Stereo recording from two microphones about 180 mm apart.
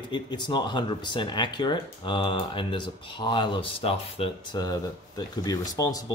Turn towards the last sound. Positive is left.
turn(degrees=20)  # may be behind; listen again after turning